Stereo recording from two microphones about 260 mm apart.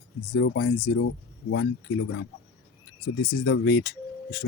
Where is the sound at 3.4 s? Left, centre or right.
Left.